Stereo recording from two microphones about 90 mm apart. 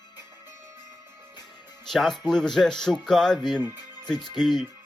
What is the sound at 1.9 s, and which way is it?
Speech, 5° left (ahead or behind).